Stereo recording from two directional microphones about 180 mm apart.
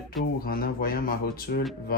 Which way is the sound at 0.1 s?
55° left (ahead or behind).